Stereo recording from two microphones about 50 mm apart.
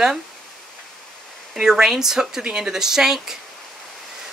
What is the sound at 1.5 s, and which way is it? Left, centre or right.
Speech, centre.